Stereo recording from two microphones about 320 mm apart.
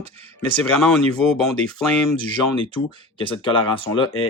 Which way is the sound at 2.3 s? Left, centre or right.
Centre.